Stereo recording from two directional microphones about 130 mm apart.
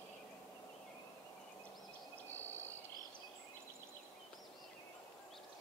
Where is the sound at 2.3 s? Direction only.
15° left (ahead or behind).